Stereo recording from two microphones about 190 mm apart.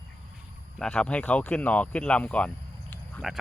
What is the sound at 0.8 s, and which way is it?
Speech, 5° left (ahead or behind).